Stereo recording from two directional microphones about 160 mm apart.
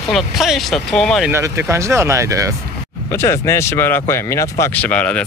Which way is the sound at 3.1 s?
15° left (ahead or behind).